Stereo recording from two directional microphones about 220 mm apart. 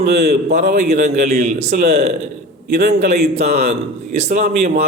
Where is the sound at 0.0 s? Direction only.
45° right (ahead or behind).